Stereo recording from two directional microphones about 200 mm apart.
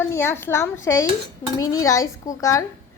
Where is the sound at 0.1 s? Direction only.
10° left (ahead or behind).